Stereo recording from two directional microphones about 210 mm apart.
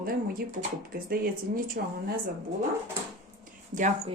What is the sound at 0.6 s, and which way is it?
Speech, 45° right (ahead or behind).